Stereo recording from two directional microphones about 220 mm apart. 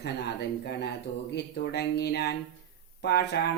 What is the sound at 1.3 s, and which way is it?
Speech, 50° left (ahead or behind).